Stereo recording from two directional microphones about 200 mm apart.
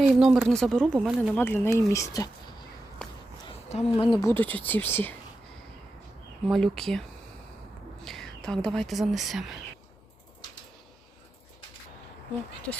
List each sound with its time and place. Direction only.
0.1 s speech: centre (ahead or behind)
1.4 s speech: 10° left (ahead or behind)
3.4 s a sound: 30° left (ahead or behind)
3.9 s speech: 20° left (ahead or behind)
6.5 s speech: centre (ahead or behind)
8.0 s a sound: centre (ahead or behind)
8.6 s speech: 5° left (ahead or behind)